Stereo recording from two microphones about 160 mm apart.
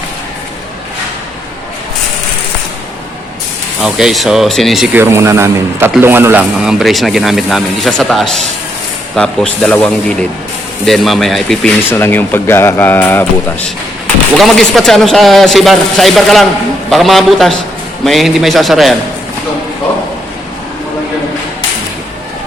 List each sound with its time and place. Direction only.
3.8 s speech: 5° right (ahead or behind)
4.9 s a man's voice: 15° right (ahead or behind); by 11.7 s centre (ahead or behind)
11.9 s speech: 15° left (ahead or behind)
14.3 s speech: centre (ahead or behind)